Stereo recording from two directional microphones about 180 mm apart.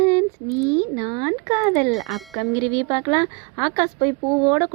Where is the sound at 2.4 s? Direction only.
20° right (ahead or behind).